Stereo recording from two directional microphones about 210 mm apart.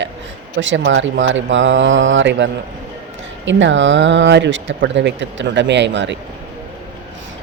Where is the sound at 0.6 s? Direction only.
65° right (ahead or behind).